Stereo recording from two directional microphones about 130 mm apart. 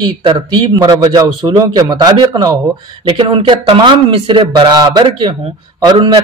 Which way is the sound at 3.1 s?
40° right (ahead or behind).